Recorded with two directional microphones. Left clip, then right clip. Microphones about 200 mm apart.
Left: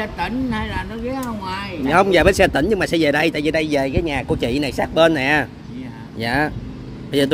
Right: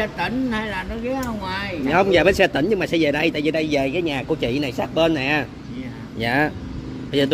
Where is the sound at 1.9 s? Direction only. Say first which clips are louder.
Left 2 dB; 20° left (ahead or behind).